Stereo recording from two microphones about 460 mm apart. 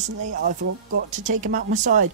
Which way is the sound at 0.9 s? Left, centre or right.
Centre.